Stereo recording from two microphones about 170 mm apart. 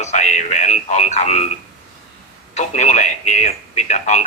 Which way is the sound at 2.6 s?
45° left (ahead or behind).